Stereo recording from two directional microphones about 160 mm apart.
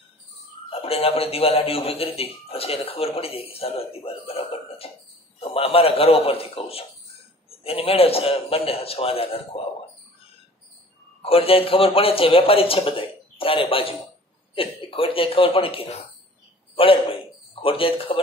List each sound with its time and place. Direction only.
0.7 s speech: 35° left (ahead or behind)
11.2 s speech: 35° left (ahead or behind)
16.7 s a sound: 35° left (ahead or behind)